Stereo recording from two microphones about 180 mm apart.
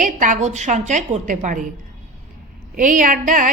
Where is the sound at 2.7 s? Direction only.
45° right (ahead or behind).